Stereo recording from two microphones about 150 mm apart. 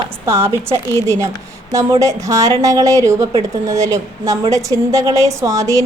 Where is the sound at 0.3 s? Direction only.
15° right (ahead or behind).